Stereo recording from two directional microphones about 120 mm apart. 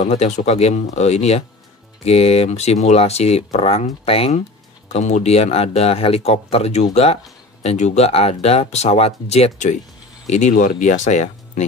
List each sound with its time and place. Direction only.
0.0 s speech: 60° left (ahead or behind)
4.8 s speech: 70° left (ahead or behind)
10.3 s speech: 90° left